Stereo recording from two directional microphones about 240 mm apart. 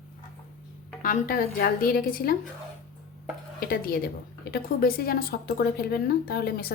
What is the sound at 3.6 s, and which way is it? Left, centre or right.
Speech, left.